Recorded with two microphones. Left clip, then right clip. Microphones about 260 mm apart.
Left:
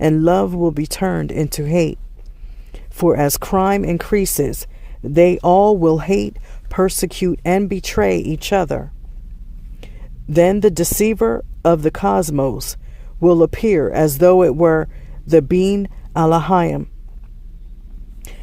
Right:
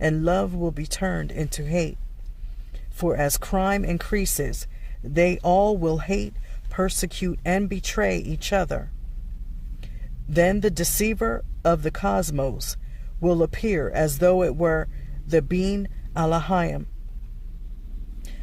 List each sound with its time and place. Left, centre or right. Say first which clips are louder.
0.0 s a woman's voice: left 8 dB; left